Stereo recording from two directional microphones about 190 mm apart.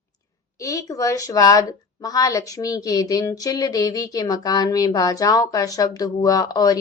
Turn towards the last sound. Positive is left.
turn(degrees=20)  # may be behind; listen again after turning